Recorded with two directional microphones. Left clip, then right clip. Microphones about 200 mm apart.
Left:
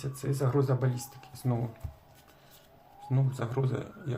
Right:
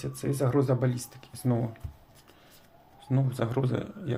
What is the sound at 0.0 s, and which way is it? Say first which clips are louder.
Speech: right 3 dB; 25° right (ahead or behind).